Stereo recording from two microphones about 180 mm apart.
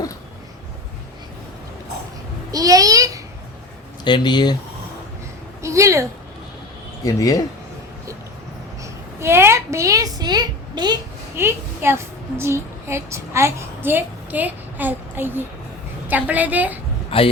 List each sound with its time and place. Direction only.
2.5 s a sound: 20° right (ahead or behind)
4.0 s speech: 25° left (ahead or behind)
5.6 s a woman's voice: 15° right (ahead or behind)
7.0 s speech: 20° left (ahead or behind)
8.8 s a sound: 15° right (ahead or behind)
11.3 s a child's voice: 15° right (ahead or behind)
17.1 s a man's voice: 30° left (ahead or behind)